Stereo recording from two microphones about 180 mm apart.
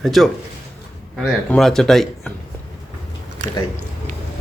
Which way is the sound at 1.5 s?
Centre (ahead or behind).